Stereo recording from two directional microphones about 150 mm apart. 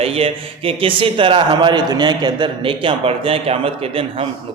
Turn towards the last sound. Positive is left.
turn(degrees=-40)  # may be behind; listen again after turning